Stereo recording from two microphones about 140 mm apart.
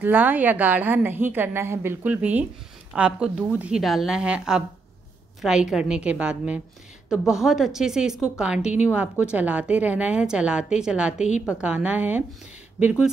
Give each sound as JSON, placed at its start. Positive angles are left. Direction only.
{"t": 0.0, "sound": "a woman's voice", "side_deg": -10}
{"t": 11.1, "sound": "a woman's voice", "side_deg": 60}
{"t": 11.4, "sound": "a woman's voice", "side_deg": -5}